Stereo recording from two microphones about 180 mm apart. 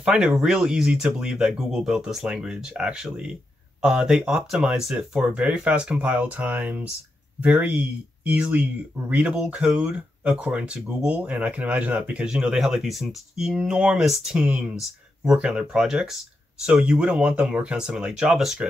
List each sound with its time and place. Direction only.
0.0 s speech: 5° right (ahead or behind)